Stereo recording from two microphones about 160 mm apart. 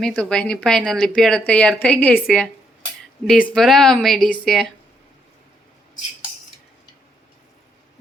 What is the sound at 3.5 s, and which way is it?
Speech, centre (ahead or behind).